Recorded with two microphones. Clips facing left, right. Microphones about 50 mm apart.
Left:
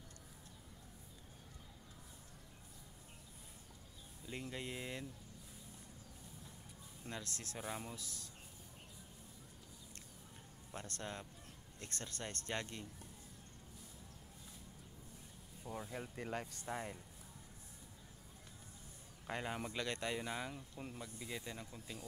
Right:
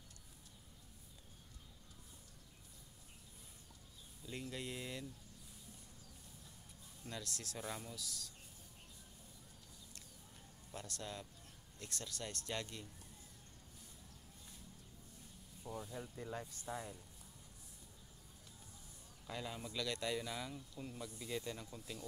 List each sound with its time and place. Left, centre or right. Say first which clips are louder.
4.3 s a sound: even; centre
7.1 s speech: left 1 dB; left
10.7 s speech: left 1 dB; left
15.9 s speech: left 3 dB; left
19.2 s speech: left 4 dB; left
21.0 s speech: right 5 dB; centre